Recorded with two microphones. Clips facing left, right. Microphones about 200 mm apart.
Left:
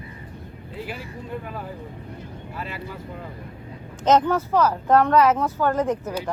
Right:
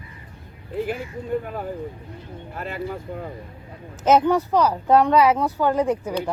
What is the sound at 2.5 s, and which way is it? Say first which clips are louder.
Speech: right 5 dB; 50° right (ahead or behind).